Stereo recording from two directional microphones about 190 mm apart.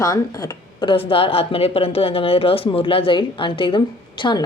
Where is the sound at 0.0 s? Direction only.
20° left (ahead or behind).